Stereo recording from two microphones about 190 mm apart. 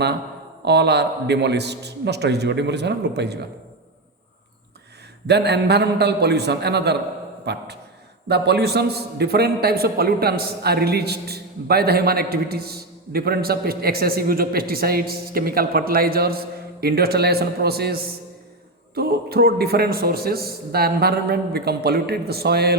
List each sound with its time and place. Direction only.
0.6 s a man's voice: 60° right (ahead or behind)
5.2 s a man's voice: 60° right (ahead or behind)